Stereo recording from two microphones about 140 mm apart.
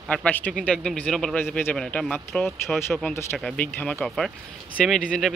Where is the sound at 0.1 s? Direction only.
10° left (ahead or behind).